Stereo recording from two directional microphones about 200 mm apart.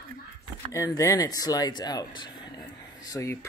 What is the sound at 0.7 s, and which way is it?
Speech, 15° left (ahead or behind).